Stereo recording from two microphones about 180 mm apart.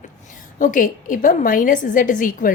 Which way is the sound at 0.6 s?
45° left (ahead or behind).